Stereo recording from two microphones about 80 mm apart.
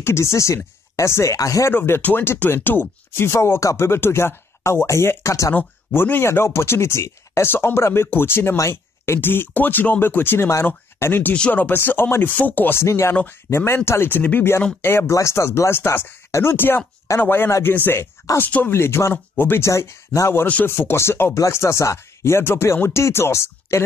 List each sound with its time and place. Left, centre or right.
0.0 s speech: left
1.7 s speech: left
5.9 s speech: left
11.3 s speech: centre
12.8 s speech: left